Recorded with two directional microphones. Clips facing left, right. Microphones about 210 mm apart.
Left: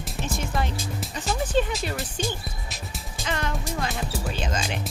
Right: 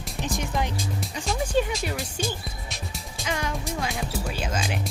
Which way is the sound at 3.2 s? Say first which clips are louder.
Even; 10° right (ahead or behind).